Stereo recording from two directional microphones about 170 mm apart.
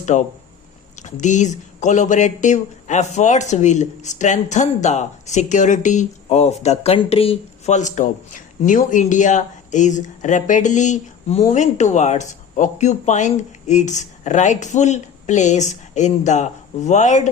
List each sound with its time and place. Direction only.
0.0 s speech: 45° left (ahead or behind)